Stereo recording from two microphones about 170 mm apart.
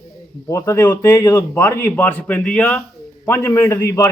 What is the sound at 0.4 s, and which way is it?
A man's voice, 20° left (ahead or behind).